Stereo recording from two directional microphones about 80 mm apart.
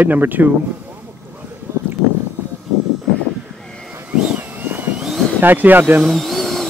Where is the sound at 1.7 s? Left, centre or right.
Right.